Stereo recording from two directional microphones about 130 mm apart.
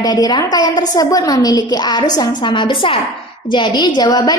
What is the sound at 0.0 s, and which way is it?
A woman's voice, 30° left (ahead or behind).